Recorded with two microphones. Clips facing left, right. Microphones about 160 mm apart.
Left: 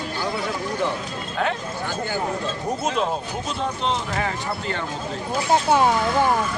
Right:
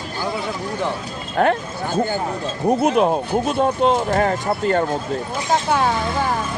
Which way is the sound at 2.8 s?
60° right (ahead or behind).